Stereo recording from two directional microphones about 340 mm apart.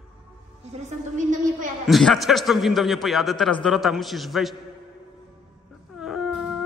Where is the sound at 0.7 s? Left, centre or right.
Right.